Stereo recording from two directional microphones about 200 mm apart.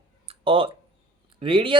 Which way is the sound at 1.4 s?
25° right (ahead or behind).